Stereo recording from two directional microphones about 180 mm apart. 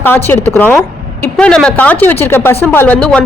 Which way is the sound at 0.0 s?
10° left (ahead or behind).